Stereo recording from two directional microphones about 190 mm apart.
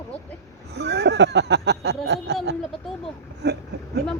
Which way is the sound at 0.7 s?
60° right (ahead or behind).